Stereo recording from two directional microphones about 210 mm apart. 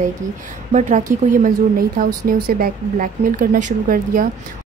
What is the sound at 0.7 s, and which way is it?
A woman's voice, 35° right (ahead or behind).